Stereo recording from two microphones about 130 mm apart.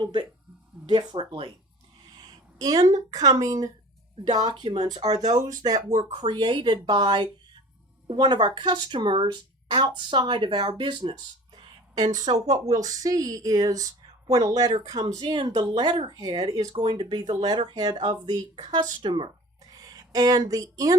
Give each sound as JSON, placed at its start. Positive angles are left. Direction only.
{"t": 0.0, "sound": "speech", "side_deg": -35}
{"t": 2.6, "sound": "speech", "side_deg": -30}
{"t": 19.7, "sound": "a sound", "side_deg": -30}
{"t": 20.5, "sound": "speech", "side_deg": -25}